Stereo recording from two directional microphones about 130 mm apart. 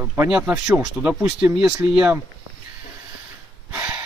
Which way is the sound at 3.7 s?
10° right (ahead or behind).